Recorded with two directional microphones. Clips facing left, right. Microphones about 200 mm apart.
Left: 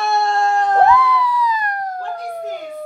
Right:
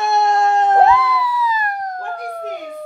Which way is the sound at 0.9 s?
10° right (ahead or behind).